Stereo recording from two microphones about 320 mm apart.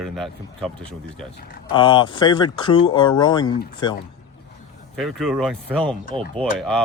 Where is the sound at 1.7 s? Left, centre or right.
Centre.